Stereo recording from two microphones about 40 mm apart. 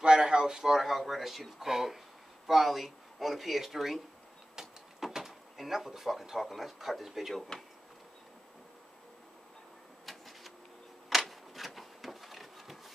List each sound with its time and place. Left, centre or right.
0.0 s speech: right
0.7 s speech: centre
10.0 s printer: centre
11.1 s a sound: centre